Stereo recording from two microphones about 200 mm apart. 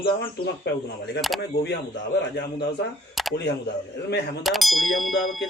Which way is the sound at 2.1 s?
60° left (ahead or behind).